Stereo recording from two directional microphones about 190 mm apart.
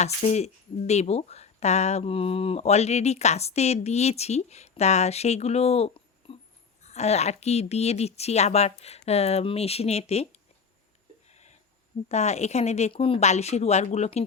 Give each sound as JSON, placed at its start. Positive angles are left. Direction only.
{"t": 0.0, "sound": "speech", "side_deg": 35}
{"t": 11.3, "sound": "a sound", "side_deg": 35}
{"t": 12.0, "sound": "speech", "side_deg": 35}